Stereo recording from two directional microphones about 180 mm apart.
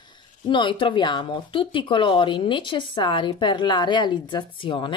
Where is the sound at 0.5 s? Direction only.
25° left (ahead or behind).